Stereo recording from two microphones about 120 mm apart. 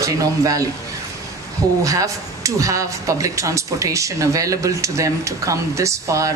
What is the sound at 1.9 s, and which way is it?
Speech, 25° right (ahead or behind).